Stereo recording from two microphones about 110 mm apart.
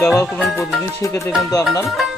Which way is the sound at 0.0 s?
25° left (ahead or behind).